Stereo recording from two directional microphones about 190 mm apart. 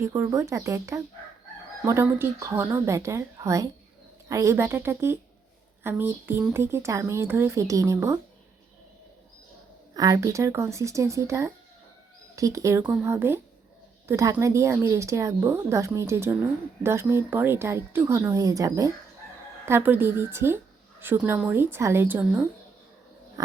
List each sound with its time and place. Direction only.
0.0 s a woman's voice: 15° right (ahead or behind)
9.9 s a woman's voice: 20° right (ahead or behind)